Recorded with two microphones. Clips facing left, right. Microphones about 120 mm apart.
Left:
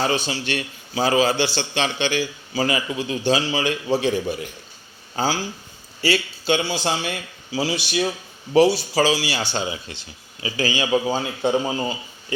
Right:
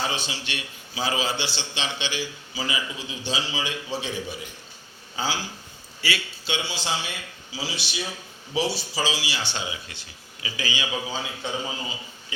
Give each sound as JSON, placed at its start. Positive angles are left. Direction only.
{"t": 0.0, "sound": "a man's voice", "side_deg": 45}
{"t": 5.1, "sound": "a man's voice", "side_deg": 40}
{"t": 9.9, "sound": "speech", "side_deg": 25}
{"t": 10.6, "sound": "a man's voice", "side_deg": 40}